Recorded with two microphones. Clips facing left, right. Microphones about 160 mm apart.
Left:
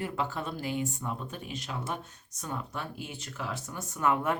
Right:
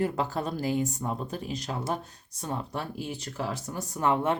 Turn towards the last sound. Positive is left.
turn(degrees=-25)  # may be behind; listen again after turning